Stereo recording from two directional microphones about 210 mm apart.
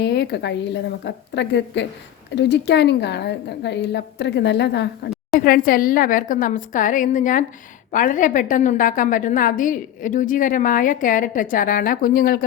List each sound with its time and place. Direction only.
0.0 s a woman's voice: 50° left (ahead or behind)
5.4 s a woman's voice: 45° left (ahead or behind)